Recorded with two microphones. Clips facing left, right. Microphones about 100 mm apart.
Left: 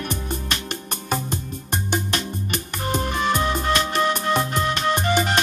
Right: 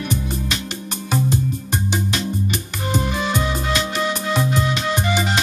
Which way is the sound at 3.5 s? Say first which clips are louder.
Left 1 dB; 50° left (ahead or behind).